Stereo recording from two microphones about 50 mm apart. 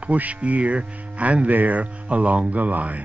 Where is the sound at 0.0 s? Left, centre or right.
Right.